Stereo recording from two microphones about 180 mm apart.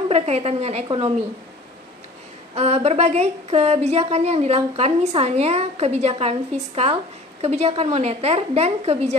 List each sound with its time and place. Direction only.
0.1 s speech: 35° right (ahead or behind)
2.5 s speech: 35° right (ahead or behind)